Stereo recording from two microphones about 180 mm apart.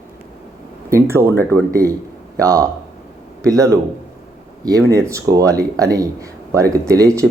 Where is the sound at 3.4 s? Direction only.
20° right (ahead or behind).